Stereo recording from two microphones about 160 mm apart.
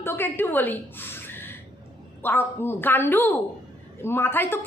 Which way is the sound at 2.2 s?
15° left (ahead or behind).